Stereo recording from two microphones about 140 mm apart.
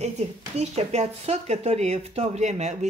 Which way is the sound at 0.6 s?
50° right (ahead or behind).